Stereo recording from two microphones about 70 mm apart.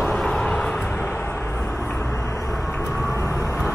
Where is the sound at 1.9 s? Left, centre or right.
Left.